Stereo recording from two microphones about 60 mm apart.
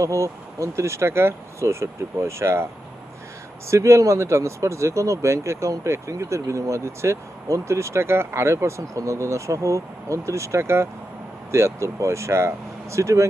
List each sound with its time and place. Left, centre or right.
0.0 s speech: right
3.7 s speech: right